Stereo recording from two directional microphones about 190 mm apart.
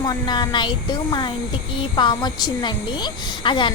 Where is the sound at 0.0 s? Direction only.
20° left (ahead or behind).